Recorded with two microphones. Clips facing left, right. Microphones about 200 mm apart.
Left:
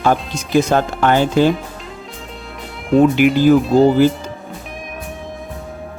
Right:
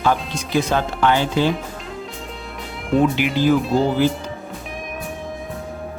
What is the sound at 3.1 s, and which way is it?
Speech, 50° left (ahead or behind).